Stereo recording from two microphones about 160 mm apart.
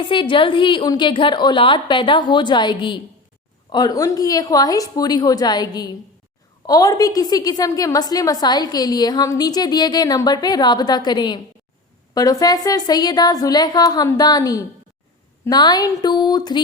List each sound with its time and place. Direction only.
0.0 s a woman's voice: 30° left (ahead or behind)